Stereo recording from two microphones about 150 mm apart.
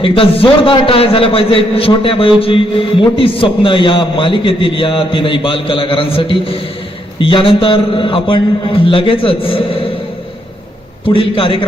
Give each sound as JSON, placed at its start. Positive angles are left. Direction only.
{"t": 0.0, "sound": "a man's voice", "side_deg": 35}
{"t": 11.0, "sound": "a man's voice", "side_deg": 35}